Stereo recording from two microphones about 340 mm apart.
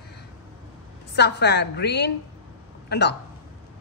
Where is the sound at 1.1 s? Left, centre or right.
Left.